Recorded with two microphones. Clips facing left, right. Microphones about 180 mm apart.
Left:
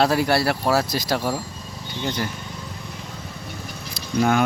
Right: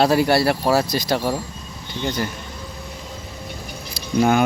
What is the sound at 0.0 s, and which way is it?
Speech, centre (ahead or behind).